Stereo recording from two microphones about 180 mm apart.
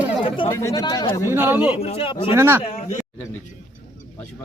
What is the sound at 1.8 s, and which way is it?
Speech, 35° left (ahead or behind).